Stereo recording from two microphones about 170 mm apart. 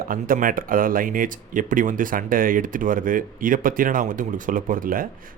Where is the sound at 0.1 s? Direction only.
55° right (ahead or behind).